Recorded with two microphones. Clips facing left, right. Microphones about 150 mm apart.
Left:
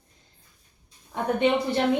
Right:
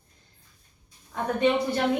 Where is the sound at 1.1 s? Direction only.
25° left (ahead or behind).